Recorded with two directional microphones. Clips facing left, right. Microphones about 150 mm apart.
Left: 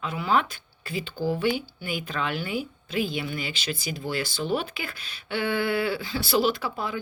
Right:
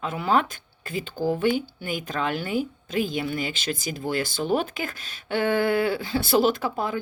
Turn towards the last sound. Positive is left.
turn(degrees=-45)  # may be behind; listen again after turning